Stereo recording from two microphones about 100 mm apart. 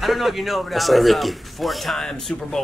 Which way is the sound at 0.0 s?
Centre (ahead or behind).